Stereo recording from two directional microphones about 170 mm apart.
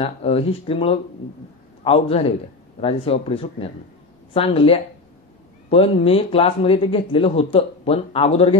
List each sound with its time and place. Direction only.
0.0 s speech: 35° left (ahead or behind)